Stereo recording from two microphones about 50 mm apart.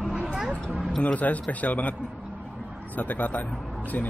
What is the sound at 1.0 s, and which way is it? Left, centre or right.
Speech, left.